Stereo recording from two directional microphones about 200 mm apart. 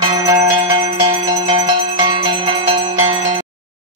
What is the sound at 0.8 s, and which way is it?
Mallet percussion, 25° right (ahead or behind).